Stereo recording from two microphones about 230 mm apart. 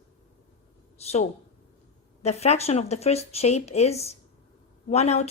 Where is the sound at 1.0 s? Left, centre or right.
Left.